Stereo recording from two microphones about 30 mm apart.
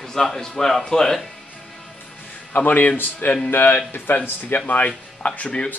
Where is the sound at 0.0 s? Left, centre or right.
Centre.